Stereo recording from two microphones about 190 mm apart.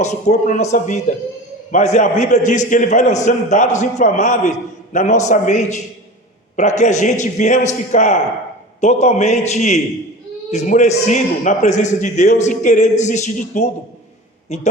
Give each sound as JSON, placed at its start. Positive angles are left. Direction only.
{"t": 0.0, "sound": "a man's voice", "side_deg": 40}